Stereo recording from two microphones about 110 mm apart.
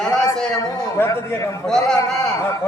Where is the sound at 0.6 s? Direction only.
25° left (ahead or behind).